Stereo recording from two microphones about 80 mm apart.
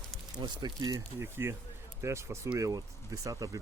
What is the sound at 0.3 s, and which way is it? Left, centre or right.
Speech, right.